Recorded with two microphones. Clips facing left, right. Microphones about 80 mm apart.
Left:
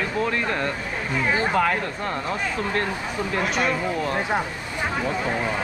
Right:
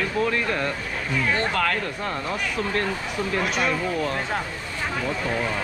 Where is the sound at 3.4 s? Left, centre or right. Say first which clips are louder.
Left 2 dB; centre.